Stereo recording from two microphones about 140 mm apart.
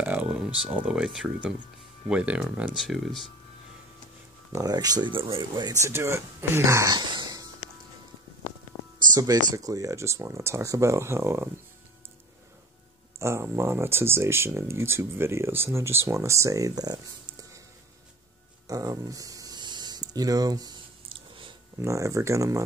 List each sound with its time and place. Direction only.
0.0 s a sound: 10° right (ahead or behind)
0.8 s speech: 5° right (ahead or behind)
4.5 s speech: 25° right (ahead or behind)
8.7 s music: 25° left (ahead or behind)
9.1 s speech: 30° right (ahead or behind)
13.2 s speech: 20° right (ahead or behind)
18.7 s a sound: 25° right (ahead or behind)
21.8 s speech: 20° right (ahead or behind)